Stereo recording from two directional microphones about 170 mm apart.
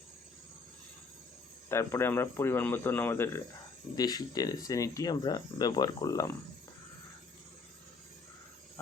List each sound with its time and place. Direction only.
1.7 s speech: 15° left (ahead or behind)